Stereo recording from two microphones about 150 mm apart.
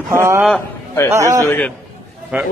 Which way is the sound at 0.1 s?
20° right (ahead or behind).